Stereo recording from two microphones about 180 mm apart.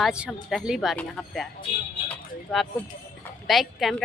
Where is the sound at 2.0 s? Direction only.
Centre (ahead or behind).